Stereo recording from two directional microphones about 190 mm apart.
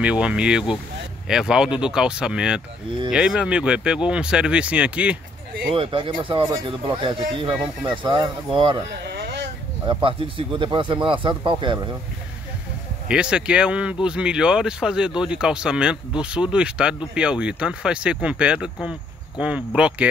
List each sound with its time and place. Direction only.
0.0 s speech: 5° right (ahead or behind)
5.8 s speech: 25° right (ahead or behind)
9.0 s a sound: 60° right (ahead or behind)
9.8 s speech: 25° right (ahead or behind)
13.1 s speech: 5° right (ahead or behind)